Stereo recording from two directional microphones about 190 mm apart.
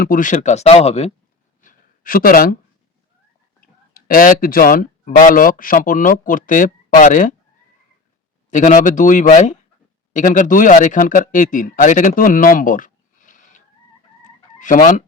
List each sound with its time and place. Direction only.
0.0 s speech: 45° left (ahead or behind)
1.6 s a sound: 50° left (ahead or behind)
3.6 s a sound: 50° left (ahead or behind)
5.1 s speech: 45° left (ahead or behind)
8.5 s speech: 40° left (ahead or behind)
14.6 s speech: 45° left (ahead or behind)